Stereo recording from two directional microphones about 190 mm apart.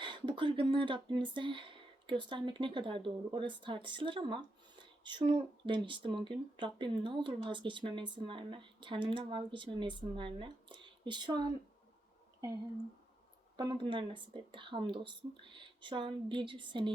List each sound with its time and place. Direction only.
0.0 s speech: 25° right (ahead or behind)
13.6 s speech: 25° right (ahead or behind)